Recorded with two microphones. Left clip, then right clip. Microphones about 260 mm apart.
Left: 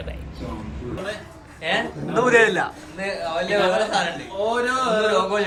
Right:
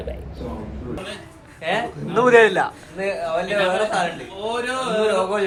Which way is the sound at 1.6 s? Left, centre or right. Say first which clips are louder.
Even; centre.